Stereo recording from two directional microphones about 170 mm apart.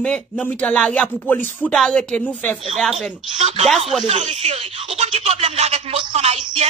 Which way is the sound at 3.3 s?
40° right (ahead or behind).